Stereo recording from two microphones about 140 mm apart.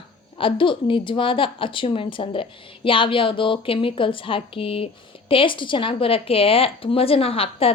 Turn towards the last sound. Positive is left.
turn(degrees=45)  # may be behind; listen again after turning